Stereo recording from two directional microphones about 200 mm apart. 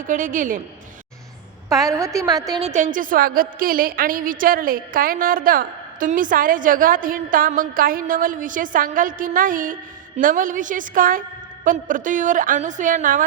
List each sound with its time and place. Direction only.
0.1 s a woman's voice: 40° right (ahead or behind)
1.7 s a woman's voice: 15° right (ahead or behind)
2.6 s a woman's voice: 35° right (ahead or behind)